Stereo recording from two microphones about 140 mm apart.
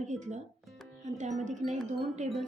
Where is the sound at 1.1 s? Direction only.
60° right (ahead or behind).